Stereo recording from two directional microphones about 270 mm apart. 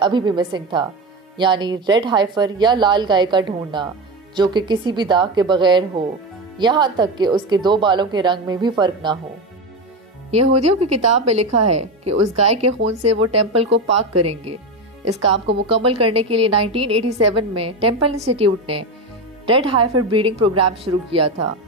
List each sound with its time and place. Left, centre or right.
0.0 s speech: centre
10.3 s a woman's voice: right
15.3 s a woman's voice: right
15.7 s a woman's voice: right